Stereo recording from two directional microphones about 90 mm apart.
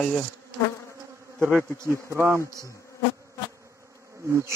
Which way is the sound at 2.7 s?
35° left (ahead or behind).